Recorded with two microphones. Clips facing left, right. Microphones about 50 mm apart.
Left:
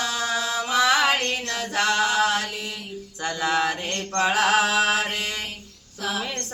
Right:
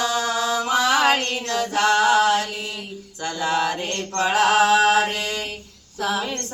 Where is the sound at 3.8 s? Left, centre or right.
Centre.